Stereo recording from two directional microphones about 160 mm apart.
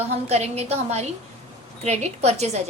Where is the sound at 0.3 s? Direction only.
40° right (ahead or behind).